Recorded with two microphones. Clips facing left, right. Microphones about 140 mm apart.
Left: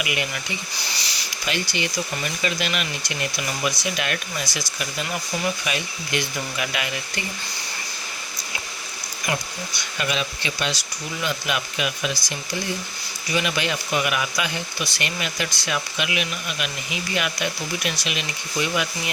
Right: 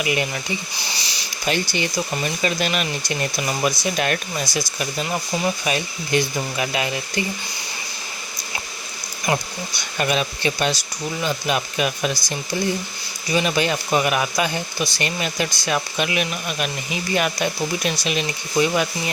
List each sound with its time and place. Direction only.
0.0 s speech: 35° right (ahead or behind)
1.5 s speech: 35° right (ahead or behind)
10.0 s speech: 45° right (ahead or behind)